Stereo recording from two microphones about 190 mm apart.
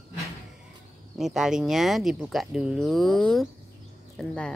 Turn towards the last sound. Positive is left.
turn(degrees=5)  # may be behind; listen again after turning